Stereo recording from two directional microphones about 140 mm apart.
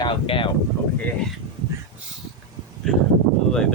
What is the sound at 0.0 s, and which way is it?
Speech, 35° left (ahead or behind).